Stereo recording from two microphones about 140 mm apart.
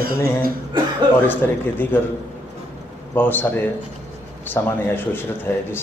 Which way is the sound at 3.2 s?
15° left (ahead or behind).